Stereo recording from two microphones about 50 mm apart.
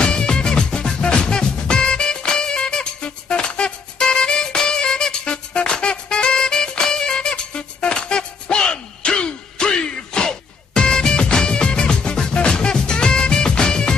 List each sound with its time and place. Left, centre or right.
0.0 s music: centre